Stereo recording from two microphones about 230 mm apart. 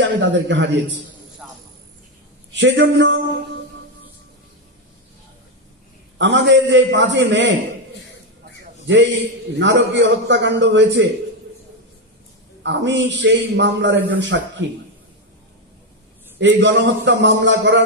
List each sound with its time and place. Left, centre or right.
0.2 s a man's voice: right
1.4 s cricket: centre
2.5 s a man's voice: right
6.1 s a man's voice: right
8.8 s a man's voice: right
12.6 s a man's voice: right
16.3 s a man's voice: right